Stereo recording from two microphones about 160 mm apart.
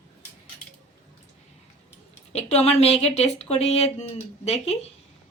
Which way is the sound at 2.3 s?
40° left (ahead or behind).